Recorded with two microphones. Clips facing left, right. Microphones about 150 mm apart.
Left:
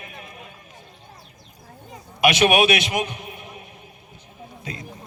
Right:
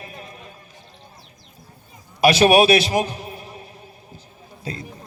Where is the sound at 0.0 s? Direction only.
35° right (ahead or behind).